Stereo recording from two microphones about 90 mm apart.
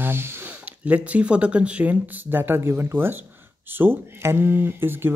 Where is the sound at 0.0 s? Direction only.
25° right (ahead or behind).